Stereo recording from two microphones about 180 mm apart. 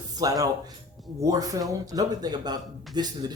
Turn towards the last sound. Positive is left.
turn(degrees=-25)  # may be behind; listen again after turning